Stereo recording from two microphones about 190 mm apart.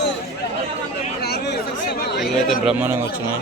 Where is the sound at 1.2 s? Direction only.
55° left (ahead or behind).